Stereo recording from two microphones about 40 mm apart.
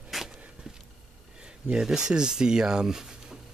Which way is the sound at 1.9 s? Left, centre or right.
Centre.